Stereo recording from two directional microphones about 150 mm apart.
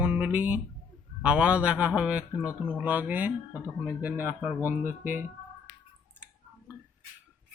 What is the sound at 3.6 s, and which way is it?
Speech, 20° left (ahead or behind).